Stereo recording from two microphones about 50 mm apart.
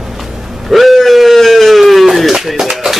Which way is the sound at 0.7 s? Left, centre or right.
Centre.